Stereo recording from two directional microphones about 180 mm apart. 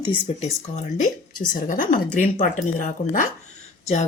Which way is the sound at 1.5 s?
50° left (ahead or behind).